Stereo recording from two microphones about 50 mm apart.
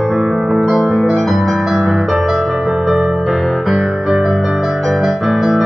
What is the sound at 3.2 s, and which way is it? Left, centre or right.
Music, centre.